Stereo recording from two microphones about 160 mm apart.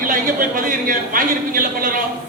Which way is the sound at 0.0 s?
60° right (ahead or behind).